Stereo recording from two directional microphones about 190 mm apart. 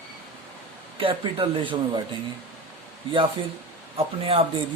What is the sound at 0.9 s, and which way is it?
Speech, 25° right (ahead or behind).